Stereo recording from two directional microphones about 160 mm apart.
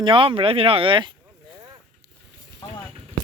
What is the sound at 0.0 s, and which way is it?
Speech, 30° right (ahead or behind).